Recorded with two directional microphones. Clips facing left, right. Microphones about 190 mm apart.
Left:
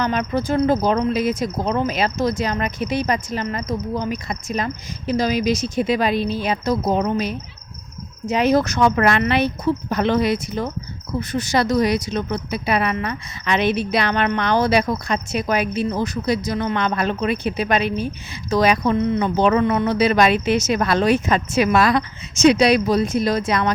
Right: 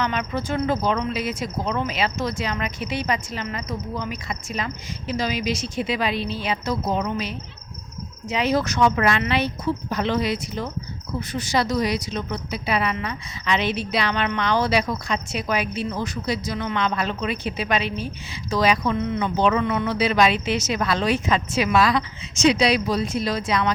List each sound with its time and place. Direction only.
0.0 s a woman's voice: 40° left (ahead or behind)